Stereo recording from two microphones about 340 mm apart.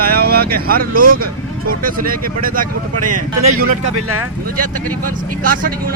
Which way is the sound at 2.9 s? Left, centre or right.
Right.